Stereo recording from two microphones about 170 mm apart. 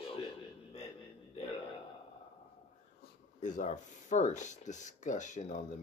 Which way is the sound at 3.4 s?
50° left (ahead or behind).